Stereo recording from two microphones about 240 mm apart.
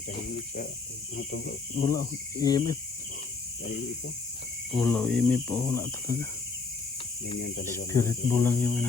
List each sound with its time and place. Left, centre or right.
0.2 s speech: left
1.8 s speech: centre
4.7 s speech: centre
7.3 s speech: left
7.9 s speech: centre